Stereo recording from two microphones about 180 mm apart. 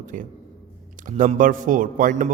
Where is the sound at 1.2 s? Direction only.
45° right (ahead or behind).